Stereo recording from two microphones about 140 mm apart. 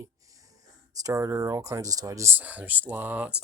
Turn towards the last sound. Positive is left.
turn(degrees=-10)  # may be behind; listen again after turning